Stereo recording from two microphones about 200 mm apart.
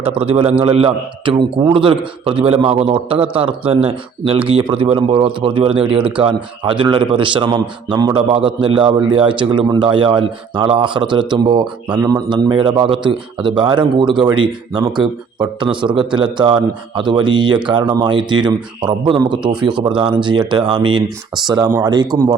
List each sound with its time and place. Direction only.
0.0 s a man's voice: 30° right (ahead or behind)